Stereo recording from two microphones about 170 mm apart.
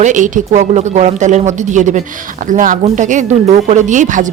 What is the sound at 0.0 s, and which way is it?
Speech, 45° right (ahead or behind).